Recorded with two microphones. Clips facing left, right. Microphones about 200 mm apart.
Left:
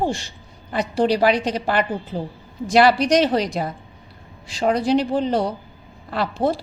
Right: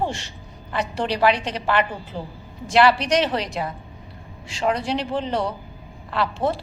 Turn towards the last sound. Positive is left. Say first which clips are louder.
# left 2 dB
turn(degrees=40)  # may be behind; listen again after turning